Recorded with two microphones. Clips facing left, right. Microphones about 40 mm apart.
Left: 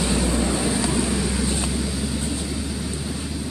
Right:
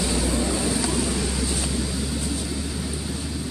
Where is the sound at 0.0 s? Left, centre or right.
Left.